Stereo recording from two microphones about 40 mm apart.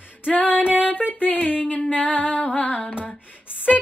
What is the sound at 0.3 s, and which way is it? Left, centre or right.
Female singing, left.